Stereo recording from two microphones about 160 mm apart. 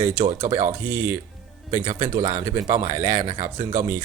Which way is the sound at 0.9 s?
15° right (ahead or behind).